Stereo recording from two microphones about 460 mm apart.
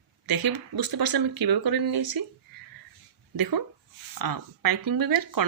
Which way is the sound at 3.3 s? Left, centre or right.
Right.